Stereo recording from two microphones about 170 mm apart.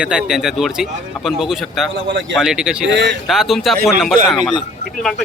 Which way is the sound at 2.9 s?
90° right.